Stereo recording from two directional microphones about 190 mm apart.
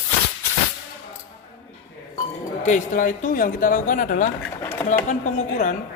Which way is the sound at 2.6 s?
40° left (ahead or behind).